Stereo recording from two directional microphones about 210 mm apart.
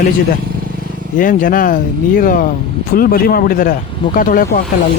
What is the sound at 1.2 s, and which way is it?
Speech, 40° left (ahead or behind).